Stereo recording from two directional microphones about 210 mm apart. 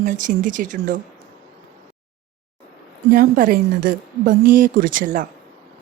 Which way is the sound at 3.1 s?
40° right (ahead or behind).